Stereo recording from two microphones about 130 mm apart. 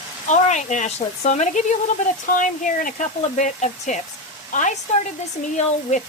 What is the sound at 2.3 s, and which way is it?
A woman's voice, 75° left (ahead or behind).